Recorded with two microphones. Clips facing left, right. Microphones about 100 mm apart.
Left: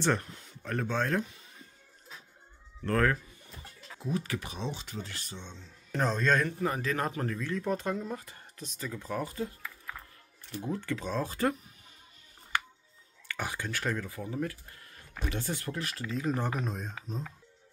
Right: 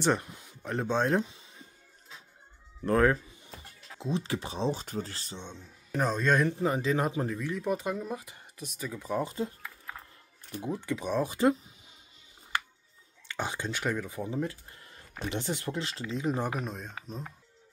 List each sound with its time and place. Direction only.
0.0 s speech: 15° right (ahead or behind)
2.8 s a man's voice: 15° right (ahead or behind)
13.3 s speech: 20° right (ahead or behind)
16.5 s speech: centre (ahead or behind)